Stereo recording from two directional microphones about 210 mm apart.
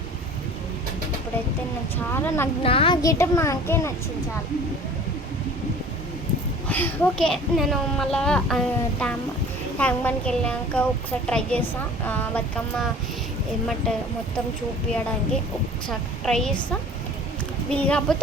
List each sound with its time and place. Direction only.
2.1 s a child's voice: 10° left (ahead or behind)
2.6 s a child's voice: 25° left (ahead or behind)
6.7 s a woman's voice: 10° left (ahead or behind)
15.9 s a woman's voice: centre (ahead or behind)
17.7 s a woman's voice: 5° left (ahead or behind)